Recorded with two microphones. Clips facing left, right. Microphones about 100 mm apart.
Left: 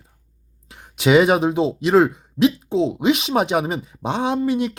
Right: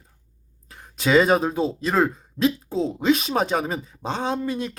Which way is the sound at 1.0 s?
15° left (ahead or behind).